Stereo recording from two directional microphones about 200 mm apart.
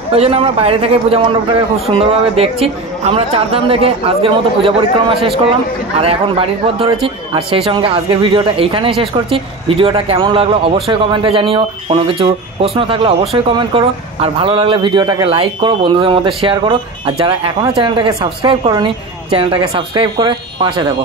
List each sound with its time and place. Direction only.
0.1 s speech: 30° right (ahead or behind)
5.9 s speech: 30° right (ahead or behind)